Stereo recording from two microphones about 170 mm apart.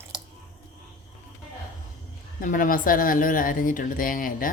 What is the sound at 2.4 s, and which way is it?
Speech, 50° left (ahead or behind).